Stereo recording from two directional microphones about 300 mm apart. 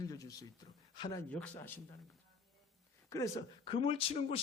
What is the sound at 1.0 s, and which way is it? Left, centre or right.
Speech, centre.